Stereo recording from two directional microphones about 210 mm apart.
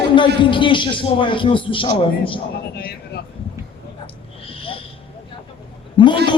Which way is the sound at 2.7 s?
50° left (ahead or behind).